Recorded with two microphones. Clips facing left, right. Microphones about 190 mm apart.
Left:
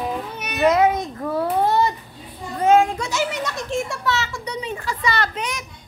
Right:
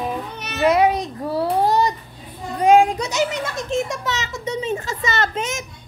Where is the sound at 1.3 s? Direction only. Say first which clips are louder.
Right 1 dB; 40° right (ahead or behind).